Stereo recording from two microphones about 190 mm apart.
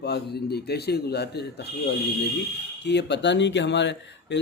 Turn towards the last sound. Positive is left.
turn(degrees=70)  # may be behind; listen again after turning